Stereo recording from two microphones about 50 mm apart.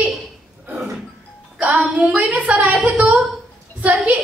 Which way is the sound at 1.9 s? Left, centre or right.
Right.